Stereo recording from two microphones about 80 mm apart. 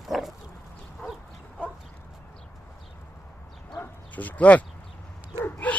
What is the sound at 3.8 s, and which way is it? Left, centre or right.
Bow-wow, left.